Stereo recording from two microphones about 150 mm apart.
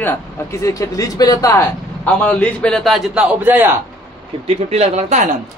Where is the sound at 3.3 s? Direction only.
15° right (ahead or behind).